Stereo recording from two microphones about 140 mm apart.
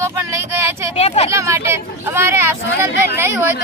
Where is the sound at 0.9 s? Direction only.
45° left (ahead or behind).